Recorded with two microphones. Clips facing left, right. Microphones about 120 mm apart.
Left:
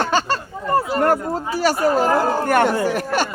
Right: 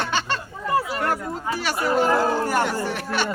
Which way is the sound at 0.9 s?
45° left (ahead or behind).